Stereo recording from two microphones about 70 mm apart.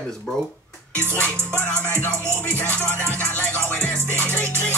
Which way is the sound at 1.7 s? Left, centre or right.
Left.